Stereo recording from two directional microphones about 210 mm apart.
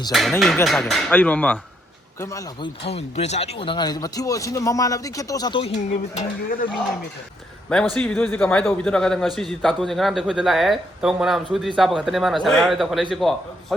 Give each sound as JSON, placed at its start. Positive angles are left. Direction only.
{"t": 0.1, "sound": "a man's voice", "side_deg": 0}
{"t": 2.8, "sound": "speech", "side_deg": 30}
{"t": 6.1, "sound": "speech", "side_deg": 40}
{"t": 7.9, "sound": "a man's voice", "side_deg": 5}